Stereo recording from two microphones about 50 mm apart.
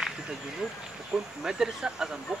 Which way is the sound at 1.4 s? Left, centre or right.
Centre.